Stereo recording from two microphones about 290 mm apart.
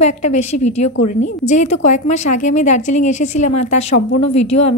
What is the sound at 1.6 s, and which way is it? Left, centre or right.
Speech, left.